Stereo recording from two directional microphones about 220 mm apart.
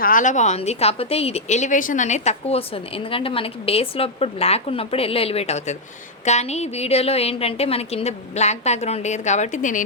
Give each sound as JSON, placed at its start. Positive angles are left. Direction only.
{"t": 0.0, "sound": "a woman's voice", "side_deg": 35}